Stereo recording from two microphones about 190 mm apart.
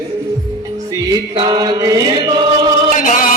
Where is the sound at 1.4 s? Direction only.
20° right (ahead or behind).